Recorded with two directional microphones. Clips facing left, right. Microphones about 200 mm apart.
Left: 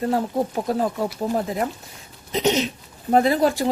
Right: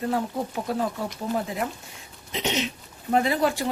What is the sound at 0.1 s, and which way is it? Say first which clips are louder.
Speech: left 5 dB; 40° left (ahead or behind).